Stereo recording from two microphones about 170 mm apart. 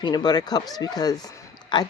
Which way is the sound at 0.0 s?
25° left (ahead or behind).